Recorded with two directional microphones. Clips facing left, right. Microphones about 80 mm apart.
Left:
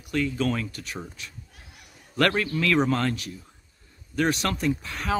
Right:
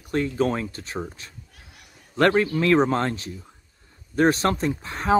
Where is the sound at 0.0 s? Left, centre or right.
Right.